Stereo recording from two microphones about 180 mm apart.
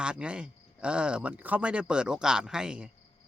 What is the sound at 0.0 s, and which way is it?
A man's voice, 5° right (ahead or behind).